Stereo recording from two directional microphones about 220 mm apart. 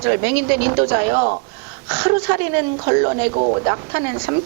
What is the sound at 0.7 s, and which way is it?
A woman's voice, 25° right (ahead or behind).